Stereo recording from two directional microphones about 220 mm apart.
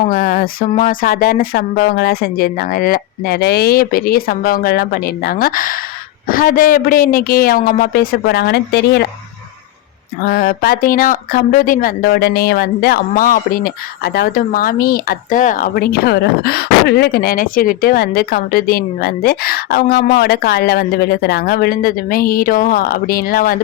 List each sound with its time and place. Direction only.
0.1 s a sound: 40° left (ahead or behind)
0.8 s a woman's voice: 40° left (ahead or behind)
10.2 s speech: 40° left (ahead or behind)